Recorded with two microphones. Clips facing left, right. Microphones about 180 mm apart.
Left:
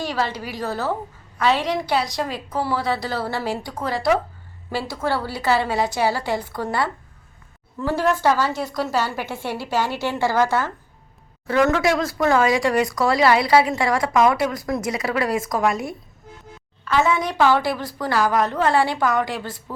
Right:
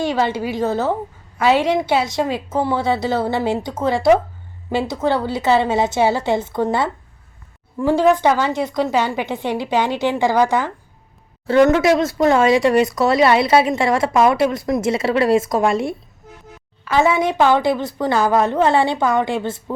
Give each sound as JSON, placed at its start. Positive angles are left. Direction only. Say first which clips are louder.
{"t": 0.0, "sound": "a woman's voice", "louder": "right 6 dB", "side_deg": -25}
{"t": 11.4, "sound": "speech", "louder": "right 5 dB", "side_deg": -25}